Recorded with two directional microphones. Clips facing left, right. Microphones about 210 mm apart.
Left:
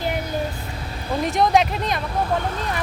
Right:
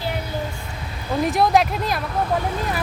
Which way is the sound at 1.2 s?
5° right (ahead or behind).